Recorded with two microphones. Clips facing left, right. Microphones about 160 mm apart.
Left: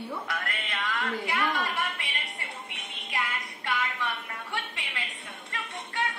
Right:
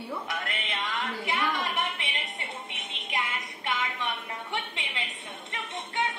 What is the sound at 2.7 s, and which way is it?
Music, 20° right (ahead or behind).